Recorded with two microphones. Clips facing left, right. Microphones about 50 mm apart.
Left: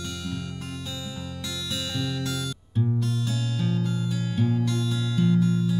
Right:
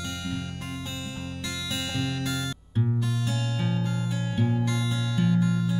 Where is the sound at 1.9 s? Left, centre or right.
Right.